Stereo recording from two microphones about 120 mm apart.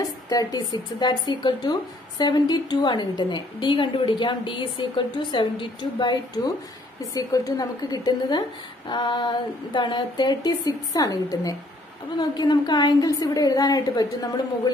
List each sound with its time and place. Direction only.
0.0 s speech: 30° left (ahead or behind)